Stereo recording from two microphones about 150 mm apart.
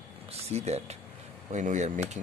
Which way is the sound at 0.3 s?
45° right (ahead or behind).